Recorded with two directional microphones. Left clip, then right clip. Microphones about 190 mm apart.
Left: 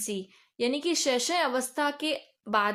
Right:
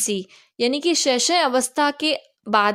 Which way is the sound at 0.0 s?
45° right (ahead or behind).